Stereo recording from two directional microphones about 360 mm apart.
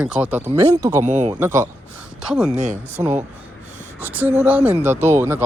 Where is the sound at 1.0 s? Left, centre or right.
Centre.